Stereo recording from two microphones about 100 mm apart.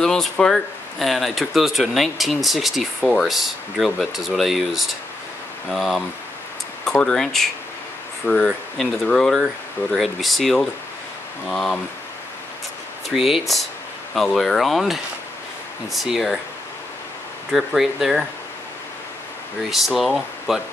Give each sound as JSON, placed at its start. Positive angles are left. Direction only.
{"t": 0.0, "sound": "speech", "side_deg": 5}
{"t": 8.3, "sound": "speech", "side_deg": 20}
{"t": 9.0, "sound": "speech", "side_deg": 5}
{"t": 13.1, "sound": "speech", "side_deg": 0}
{"t": 17.5, "sound": "speech", "side_deg": 0}
{"t": 19.7, "sound": "speech", "side_deg": 0}